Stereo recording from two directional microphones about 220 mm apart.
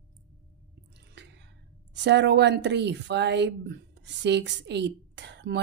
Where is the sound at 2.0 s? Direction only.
50° right (ahead or behind).